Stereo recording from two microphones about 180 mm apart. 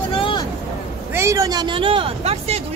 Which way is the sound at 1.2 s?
20° right (ahead or behind).